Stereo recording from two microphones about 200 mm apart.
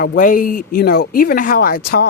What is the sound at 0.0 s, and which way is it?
Speech, 45° left (ahead or behind).